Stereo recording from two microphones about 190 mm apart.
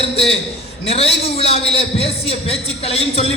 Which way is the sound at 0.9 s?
30° left (ahead or behind).